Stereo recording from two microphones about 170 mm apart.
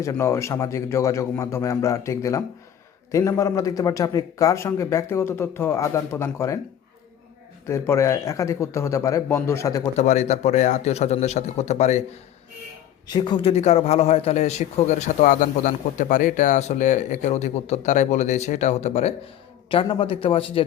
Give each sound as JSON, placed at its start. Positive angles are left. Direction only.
{"t": 0.0, "sound": "a man's voice", "side_deg": 15}
{"t": 7.7, "sound": "a man's voice", "side_deg": 15}
{"t": 10.0, "sound": "a man's voice", "side_deg": 40}
{"t": 13.1, "sound": "a man's voice", "side_deg": 30}